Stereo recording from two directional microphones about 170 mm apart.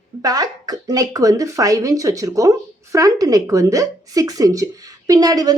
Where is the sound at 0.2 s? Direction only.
20° right (ahead or behind).